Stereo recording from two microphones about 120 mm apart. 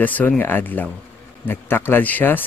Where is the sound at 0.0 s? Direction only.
15° left (ahead or behind).